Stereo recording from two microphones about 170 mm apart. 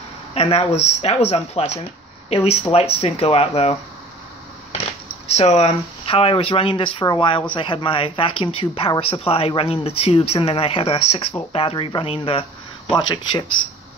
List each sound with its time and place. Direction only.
0.3 s speech: 35° left (ahead or behind)
5.3 s speech: 40° left (ahead or behind)